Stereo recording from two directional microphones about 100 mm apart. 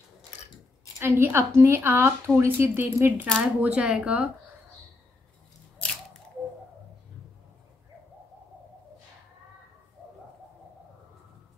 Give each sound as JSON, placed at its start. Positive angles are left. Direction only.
{"t": 0.9, "sound": "a woman's voice", "side_deg": -25}
{"t": 3.3, "sound": "speech", "side_deg": -10}